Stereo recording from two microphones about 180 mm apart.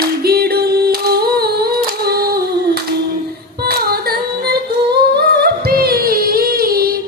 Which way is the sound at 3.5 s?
60° right (ahead or behind).